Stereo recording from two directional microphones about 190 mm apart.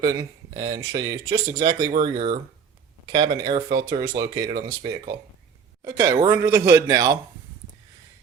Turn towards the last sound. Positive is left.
turn(degrees=-20)  # may be behind; listen again after turning